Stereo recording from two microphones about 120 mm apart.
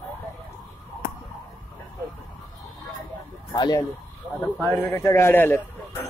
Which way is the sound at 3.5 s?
35° left (ahead or behind).